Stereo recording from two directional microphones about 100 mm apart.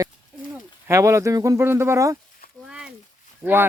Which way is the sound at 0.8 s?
30° right (ahead or behind).